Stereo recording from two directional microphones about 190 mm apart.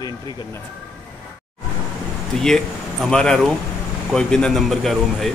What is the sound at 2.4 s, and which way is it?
Speech, centre (ahead or behind).